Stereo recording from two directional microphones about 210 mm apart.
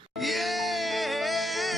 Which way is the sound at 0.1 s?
Centre (ahead or behind).